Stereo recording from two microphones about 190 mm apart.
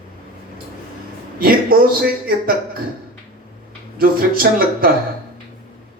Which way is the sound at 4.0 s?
50° right (ahead or behind).